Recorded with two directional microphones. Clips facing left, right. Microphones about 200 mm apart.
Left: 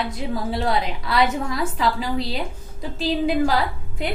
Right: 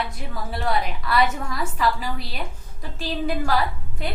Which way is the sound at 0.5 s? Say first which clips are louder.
Right 1 dB; 20° left (ahead or behind).